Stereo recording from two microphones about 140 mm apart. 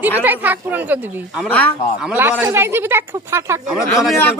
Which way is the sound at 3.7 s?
Centre (ahead or behind).